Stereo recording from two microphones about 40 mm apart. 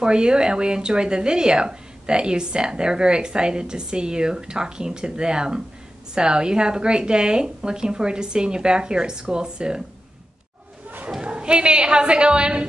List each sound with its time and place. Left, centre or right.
0.0 s a woman's voice: right
11.1 s a woman's voice: right